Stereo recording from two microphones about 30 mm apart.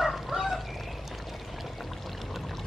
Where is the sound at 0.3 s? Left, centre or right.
Centre.